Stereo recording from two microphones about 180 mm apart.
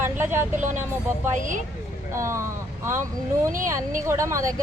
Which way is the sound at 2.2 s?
15° right (ahead or behind).